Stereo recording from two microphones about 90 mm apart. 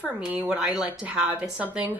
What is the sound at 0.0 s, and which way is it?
A woman's voice, 15° right (ahead or behind).